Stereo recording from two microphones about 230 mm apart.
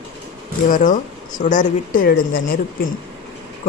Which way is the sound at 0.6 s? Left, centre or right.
Left.